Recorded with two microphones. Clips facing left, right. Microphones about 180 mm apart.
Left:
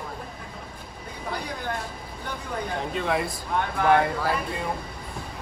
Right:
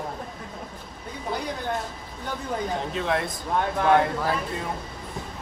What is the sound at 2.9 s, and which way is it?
Speech, centre (ahead or behind).